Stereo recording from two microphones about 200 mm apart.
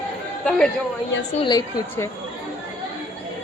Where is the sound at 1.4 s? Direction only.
20° left (ahead or behind).